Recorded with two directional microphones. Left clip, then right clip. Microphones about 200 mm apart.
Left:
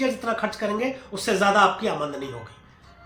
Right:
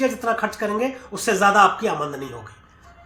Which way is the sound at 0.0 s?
20° right (ahead or behind).